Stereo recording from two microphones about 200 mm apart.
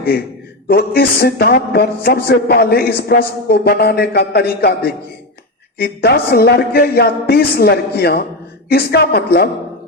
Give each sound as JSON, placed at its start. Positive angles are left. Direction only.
{"t": 0.7, "sound": "a man's voice", "side_deg": 50}